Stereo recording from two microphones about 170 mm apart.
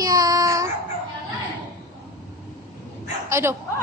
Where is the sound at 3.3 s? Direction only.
15° right (ahead or behind).